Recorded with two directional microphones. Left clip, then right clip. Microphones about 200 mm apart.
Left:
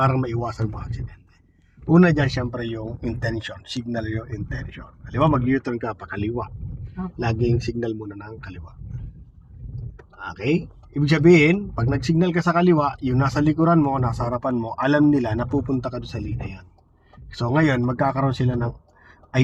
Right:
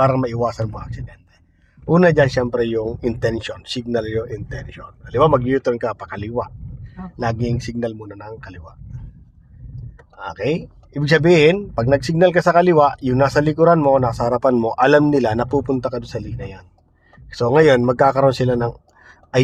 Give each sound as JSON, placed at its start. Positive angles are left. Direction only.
{"t": 0.0, "sound": "speech", "side_deg": -55}
{"t": 1.9, "sound": "speech", "side_deg": -45}
{"t": 10.4, "sound": "a man's voice", "side_deg": -50}